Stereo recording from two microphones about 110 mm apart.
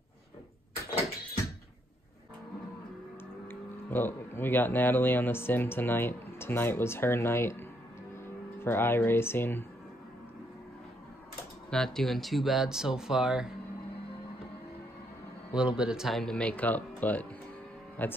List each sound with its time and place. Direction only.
3.4 s speech: 20° left (ahead or behind)
11.7 s speech: 5° left (ahead or behind)
15.5 s speech: 10° right (ahead or behind); by 18.1 s 15° left (ahead or behind)